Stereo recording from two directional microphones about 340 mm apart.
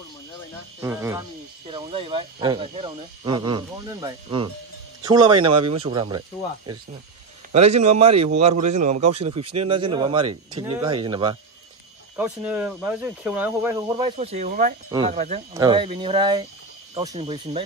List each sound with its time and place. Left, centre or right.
0.7 s a man's voice: centre